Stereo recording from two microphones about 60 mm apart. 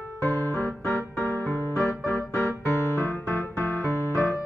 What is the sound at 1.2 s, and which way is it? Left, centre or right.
Music, left.